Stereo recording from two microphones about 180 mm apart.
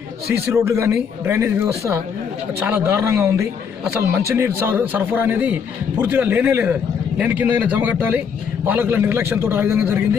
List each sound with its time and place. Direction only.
0.3 s a man's voice: 15° right (ahead or behind)